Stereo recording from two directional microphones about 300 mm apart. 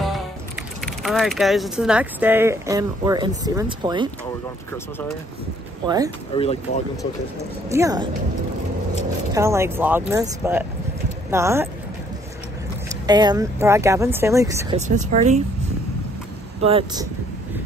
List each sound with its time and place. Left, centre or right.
0.7 s speech: centre
6.3 s speech: centre
7.7 s speech: centre
9.3 s speech: centre
13.0 s speech: centre
14.8 s speech: right
16.6 s speech: centre